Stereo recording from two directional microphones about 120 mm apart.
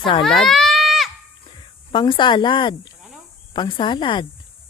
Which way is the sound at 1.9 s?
40° left (ahead or behind).